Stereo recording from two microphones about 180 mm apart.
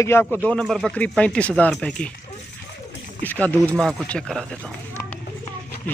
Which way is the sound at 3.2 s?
10° left (ahead or behind).